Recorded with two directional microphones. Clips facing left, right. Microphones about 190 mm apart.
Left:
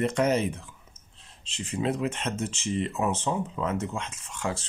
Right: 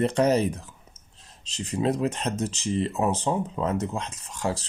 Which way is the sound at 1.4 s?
40° right (ahead or behind).